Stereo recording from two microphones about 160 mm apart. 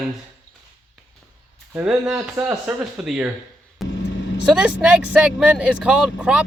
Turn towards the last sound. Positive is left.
turn(degrees=-5)  # may be behind; listen again after turning